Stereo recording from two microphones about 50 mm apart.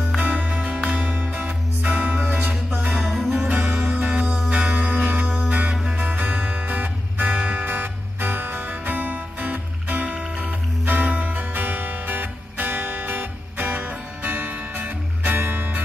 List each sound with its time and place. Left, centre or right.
0.5 s music: right
3.0 s music: centre
3.3 s music: right
3.7 s music: centre
5.9 s music: right
10.0 s music: centre
10.3 s music: right